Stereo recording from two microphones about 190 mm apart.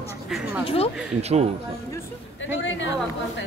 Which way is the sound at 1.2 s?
35° right (ahead or behind).